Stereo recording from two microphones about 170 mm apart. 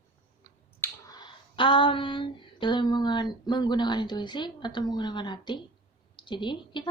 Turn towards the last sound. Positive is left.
turn(degrees=30)  # may be behind; listen again after turning